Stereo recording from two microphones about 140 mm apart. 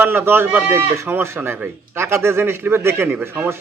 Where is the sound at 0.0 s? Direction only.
15° right (ahead or behind).